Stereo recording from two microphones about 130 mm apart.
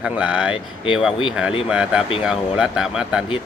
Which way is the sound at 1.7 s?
10° right (ahead or behind).